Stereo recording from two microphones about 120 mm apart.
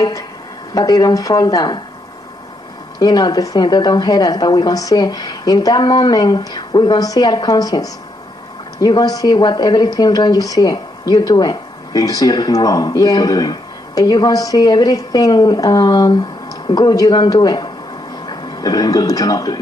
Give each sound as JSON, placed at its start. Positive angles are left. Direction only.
{"t": 0.7, "sound": "speech", "side_deg": 30}
{"t": 3.0, "sound": "speech", "side_deg": 35}